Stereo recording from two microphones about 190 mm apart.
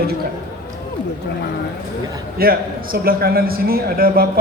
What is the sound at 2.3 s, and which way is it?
A man's voice, 50° right (ahead or behind).